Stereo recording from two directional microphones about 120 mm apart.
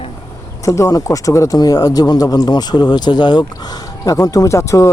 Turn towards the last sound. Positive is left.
turn(degrees=25)  # may be behind; listen again after turning